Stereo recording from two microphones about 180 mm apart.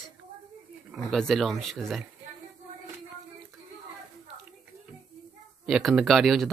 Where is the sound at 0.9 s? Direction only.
Centre (ahead or behind).